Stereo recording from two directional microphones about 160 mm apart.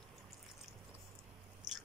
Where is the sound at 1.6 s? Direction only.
25° right (ahead or behind).